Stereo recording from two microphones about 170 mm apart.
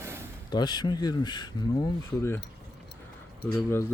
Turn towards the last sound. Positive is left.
turn(degrees=15)  # may be behind; listen again after turning